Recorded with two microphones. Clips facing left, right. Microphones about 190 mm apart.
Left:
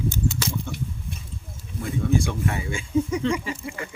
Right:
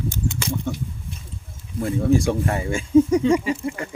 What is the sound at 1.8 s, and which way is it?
Speech, 45° right (ahead or behind).